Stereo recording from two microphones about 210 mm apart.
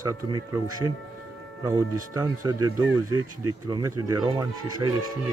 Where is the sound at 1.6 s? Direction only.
15° right (ahead or behind).